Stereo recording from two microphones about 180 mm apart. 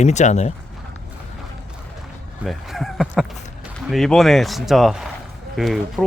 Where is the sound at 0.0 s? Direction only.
40° left (ahead or behind).